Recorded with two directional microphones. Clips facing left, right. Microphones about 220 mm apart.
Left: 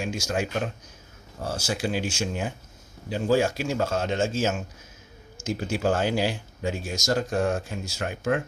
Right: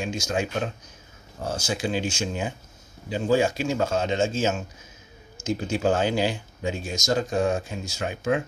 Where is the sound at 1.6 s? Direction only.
5° left (ahead or behind).